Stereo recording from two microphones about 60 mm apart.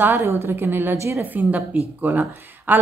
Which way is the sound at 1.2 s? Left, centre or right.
Right.